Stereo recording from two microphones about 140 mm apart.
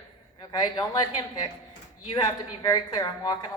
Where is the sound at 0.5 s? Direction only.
30° left (ahead or behind).